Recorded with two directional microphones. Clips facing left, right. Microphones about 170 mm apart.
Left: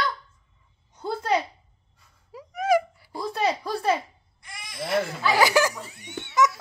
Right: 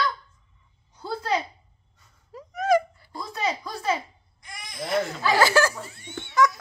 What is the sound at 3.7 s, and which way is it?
Speech, 60° left (ahead or behind).